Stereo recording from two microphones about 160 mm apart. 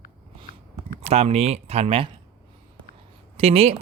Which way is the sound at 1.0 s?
40° right (ahead or behind).